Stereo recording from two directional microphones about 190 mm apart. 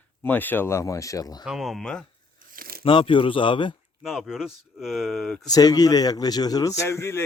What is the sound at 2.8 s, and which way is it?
Speech, 25° left (ahead or behind).